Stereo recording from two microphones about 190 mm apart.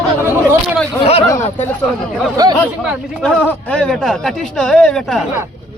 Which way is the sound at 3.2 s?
5° left (ahead or behind).